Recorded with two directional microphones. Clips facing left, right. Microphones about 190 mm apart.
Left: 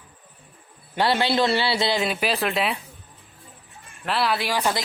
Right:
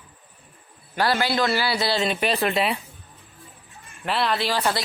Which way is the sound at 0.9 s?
25° left (ahead or behind).